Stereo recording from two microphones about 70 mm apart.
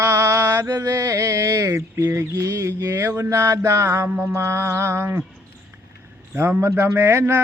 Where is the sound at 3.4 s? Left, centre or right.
Right.